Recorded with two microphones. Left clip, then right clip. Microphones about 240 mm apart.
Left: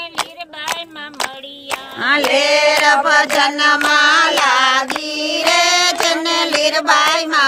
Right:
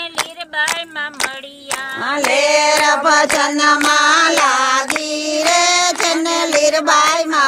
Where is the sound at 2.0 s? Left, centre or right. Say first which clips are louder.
Left 2 dB; right.